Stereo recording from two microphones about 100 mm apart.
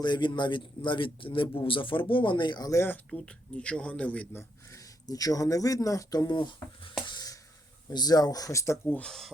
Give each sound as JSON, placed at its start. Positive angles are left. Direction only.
{"t": 0.0, "sound": "a man's voice", "side_deg": 50}
{"t": 3.1, "sound": "a man's voice", "side_deg": 10}
{"t": 7.0, "sound": "a sound", "side_deg": 45}
{"t": 7.9, "sound": "a man's voice", "side_deg": 40}
{"t": 9.0, "sound": "speech", "side_deg": 5}